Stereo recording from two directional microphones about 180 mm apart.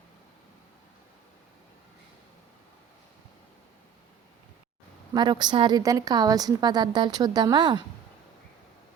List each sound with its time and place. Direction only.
5.1 s a woman's voice: 25° right (ahead or behind)